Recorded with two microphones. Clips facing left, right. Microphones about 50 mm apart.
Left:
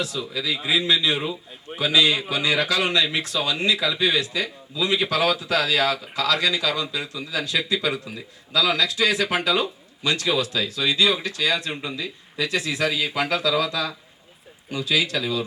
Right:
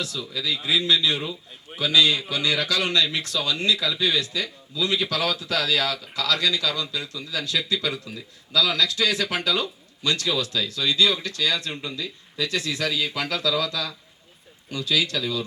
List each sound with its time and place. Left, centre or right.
0.0 s a man's voice: left